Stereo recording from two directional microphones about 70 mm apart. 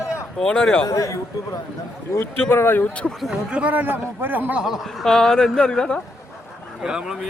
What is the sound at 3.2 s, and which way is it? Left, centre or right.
Speech, centre.